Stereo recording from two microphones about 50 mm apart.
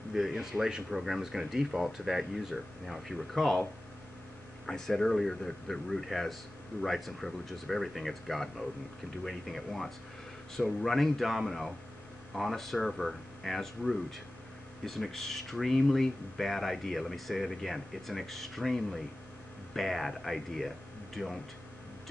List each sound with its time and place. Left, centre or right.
0.1 s speech: centre
4.6 s speech: centre